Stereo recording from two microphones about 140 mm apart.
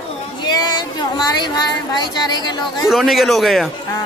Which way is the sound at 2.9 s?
Centre (ahead or behind).